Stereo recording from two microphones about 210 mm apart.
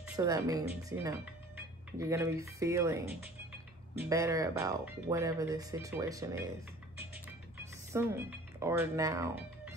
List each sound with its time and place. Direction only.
0.2 s speech: 15° right (ahead or behind)
4.0 s speech: 15° right (ahead or behind)
7.5 s speech: 10° right (ahead or behind)